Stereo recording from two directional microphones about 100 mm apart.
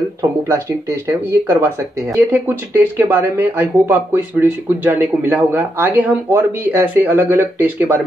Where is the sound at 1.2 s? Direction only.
25° right (ahead or behind).